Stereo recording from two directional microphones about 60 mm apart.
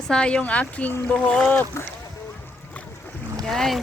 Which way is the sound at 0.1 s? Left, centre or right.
Centre.